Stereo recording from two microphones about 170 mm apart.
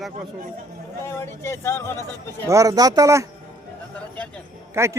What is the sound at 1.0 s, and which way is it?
Speech, 15° left (ahead or behind).